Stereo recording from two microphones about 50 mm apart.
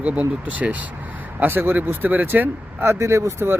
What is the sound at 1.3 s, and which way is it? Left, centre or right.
Speech, right.